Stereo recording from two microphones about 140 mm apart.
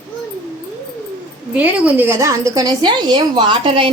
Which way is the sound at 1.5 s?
10° right (ahead or behind).